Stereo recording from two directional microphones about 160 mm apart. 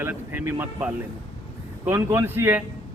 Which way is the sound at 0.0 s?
15° right (ahead or behind).